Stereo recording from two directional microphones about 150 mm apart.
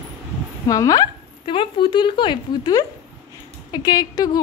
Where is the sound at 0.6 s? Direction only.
25° left (ahead or behind).